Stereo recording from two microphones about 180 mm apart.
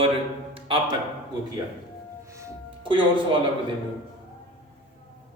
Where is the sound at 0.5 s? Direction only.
30° right (ahead or behind).